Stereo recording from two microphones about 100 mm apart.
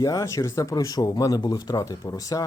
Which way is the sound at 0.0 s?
35° left (ahead or behind).